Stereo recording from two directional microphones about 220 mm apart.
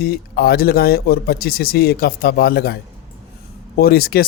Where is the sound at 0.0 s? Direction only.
45° left (ahead or behind).